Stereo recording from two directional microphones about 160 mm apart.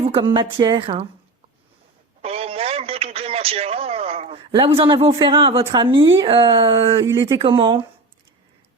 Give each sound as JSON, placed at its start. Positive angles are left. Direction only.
{"t": 0.0, "sound": "a woman's voice", "side_deg": -35}
{"t": 2.2, "sound": "a woman's voice", "side_deg": -40}